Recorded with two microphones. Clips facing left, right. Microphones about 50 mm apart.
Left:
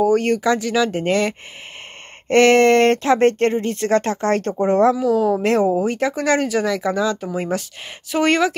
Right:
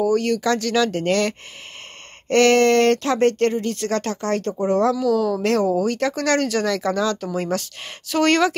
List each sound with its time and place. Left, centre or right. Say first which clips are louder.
0.0 s speech: left 3 dB; left
0.4 s speech: left 1 dB; centre